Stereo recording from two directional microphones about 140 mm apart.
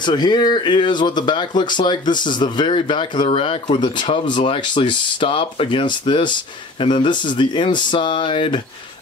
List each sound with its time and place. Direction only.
0.0 s speech: 30° left (ahead or behind)